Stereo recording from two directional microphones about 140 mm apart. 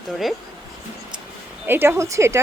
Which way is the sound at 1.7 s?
15° right (ahead or behind).